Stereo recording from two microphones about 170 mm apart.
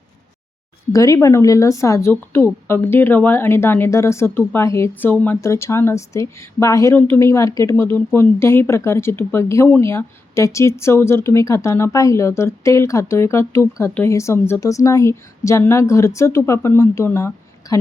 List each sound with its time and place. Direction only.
0.9 s a woman's voice: 20° left (ahead or behind)